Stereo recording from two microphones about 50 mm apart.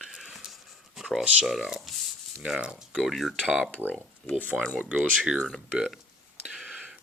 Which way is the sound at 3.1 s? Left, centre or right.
Centre.